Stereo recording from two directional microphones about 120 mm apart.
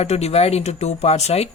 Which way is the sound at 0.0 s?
60° left (ahead or behind).